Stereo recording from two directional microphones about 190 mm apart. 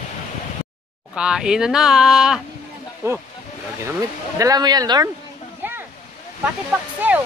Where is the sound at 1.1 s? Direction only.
5° right (ahead or behind).